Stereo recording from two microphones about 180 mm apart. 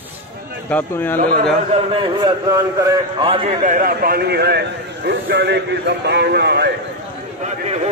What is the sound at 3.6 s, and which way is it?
A man's voice, 50° right (ahead or behind).